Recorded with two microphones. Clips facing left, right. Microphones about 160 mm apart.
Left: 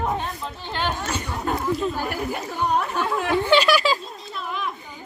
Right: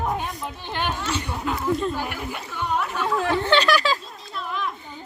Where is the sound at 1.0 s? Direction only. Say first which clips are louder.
Even; 45° left (ahead or behind).